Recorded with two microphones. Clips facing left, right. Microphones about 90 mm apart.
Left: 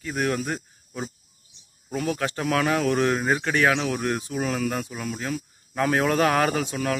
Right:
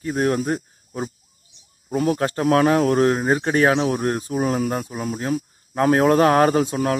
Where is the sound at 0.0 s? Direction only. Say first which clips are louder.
Right 5 dB; 35° right (ahead or behind).